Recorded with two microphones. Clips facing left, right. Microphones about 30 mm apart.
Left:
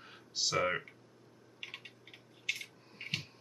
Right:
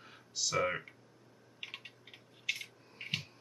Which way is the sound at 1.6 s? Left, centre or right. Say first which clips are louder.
Even; centre.